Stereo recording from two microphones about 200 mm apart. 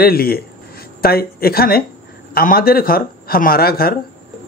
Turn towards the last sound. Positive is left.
turn(degrees=50)  # may be behind; listen again after turning